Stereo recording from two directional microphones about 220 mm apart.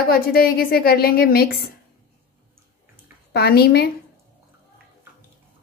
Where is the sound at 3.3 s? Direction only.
45° left (ahead or behind).